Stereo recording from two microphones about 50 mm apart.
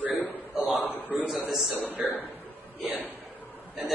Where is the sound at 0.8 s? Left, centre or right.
Left.